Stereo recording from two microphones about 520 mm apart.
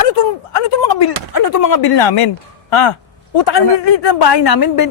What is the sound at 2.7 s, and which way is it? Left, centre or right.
Speech, left.